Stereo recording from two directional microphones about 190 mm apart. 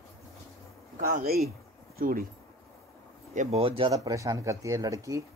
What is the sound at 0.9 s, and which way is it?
Speech, 50° right (ahead or behind).